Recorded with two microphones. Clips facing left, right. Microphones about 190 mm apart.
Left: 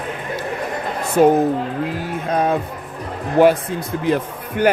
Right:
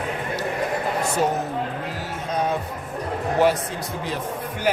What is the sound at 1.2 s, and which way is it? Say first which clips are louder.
Speech: left 11 dB; 55° left (ahead or behind).